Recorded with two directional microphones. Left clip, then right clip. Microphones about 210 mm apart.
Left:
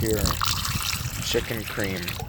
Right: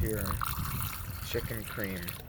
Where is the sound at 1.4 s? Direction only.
5° right (ahead or behind).